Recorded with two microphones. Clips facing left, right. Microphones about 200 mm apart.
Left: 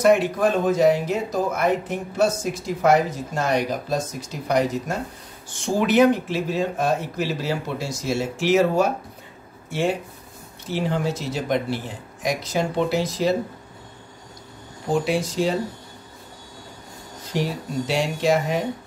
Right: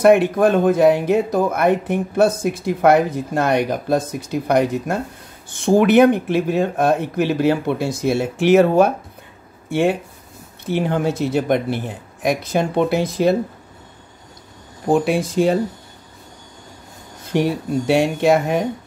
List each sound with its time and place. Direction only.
0.0 s speech: 60° right (ahead or behind)
14.9 s speech: 55° right (ahead or behind)
17.2 s speech: 60° right (ahead or behind)